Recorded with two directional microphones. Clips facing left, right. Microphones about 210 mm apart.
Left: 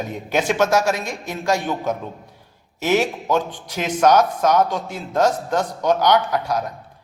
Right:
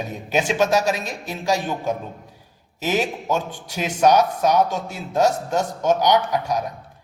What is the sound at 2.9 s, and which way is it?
Speech, 10° right (ahead or behind).